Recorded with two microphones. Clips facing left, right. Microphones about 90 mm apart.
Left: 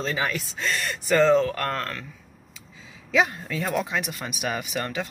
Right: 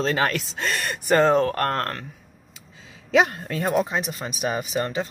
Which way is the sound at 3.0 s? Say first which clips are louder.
Right 3 dB; 65° right (ahead or behind).